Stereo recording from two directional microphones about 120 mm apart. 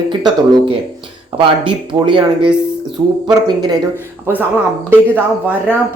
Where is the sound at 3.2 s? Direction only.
35° right (ahead or behind).